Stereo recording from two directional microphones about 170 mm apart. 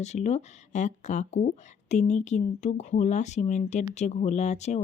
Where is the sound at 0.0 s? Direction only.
40° left (ahead or behind).